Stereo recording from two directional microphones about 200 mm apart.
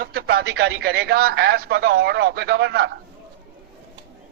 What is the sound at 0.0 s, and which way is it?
A man's voice, 50° right (ahead or behind).